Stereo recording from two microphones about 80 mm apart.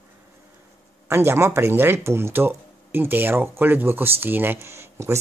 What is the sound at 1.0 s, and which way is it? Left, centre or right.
Speech, right.